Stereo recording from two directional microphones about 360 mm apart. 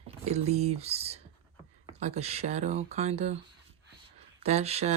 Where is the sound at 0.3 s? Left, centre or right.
Centre.